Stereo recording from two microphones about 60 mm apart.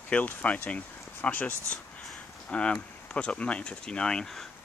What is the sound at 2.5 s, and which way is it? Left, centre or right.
Speech, centre.